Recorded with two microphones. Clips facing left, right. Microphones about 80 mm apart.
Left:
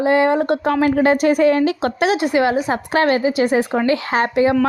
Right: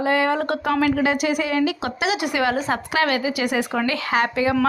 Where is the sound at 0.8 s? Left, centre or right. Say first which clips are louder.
Left 8 dB; left.